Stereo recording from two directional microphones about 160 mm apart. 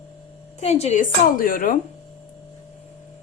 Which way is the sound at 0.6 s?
40° left (ahead or behind).